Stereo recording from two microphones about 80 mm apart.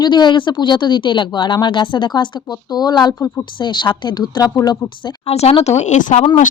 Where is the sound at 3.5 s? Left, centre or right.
Left.